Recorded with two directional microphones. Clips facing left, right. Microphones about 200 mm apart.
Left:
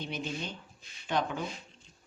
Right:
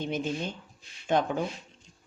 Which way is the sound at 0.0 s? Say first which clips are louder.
Right 6 dB; 50° right (ahead or behind).